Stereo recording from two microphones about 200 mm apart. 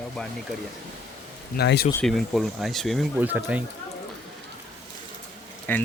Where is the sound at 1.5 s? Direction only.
55° left (ahead or behind).